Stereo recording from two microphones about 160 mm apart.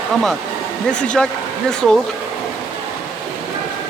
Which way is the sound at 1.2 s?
5° left (ahead or behind).